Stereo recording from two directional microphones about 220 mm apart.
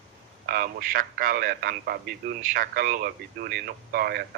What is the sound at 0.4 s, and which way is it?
A man's voice, 40° right (ahead or behind).